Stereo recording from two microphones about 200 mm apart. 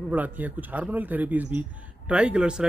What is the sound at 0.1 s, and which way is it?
A man's voice, 10° right (ahead or behind).